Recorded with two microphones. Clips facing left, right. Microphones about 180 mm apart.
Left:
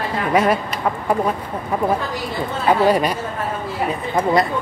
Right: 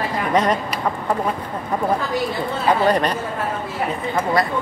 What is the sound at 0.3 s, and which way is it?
Speech, 10° left (ahead or behind).